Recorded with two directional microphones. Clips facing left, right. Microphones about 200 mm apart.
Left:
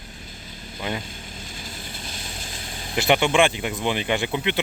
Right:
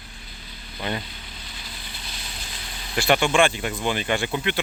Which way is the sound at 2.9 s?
20° left (ahead or behind).